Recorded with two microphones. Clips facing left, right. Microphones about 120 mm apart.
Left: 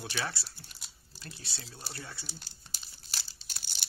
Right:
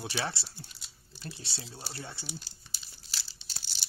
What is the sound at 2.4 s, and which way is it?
Crumpling, 50° left (ahead or behind).